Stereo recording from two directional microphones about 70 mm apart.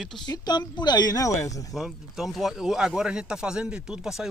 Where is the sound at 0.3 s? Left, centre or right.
Left.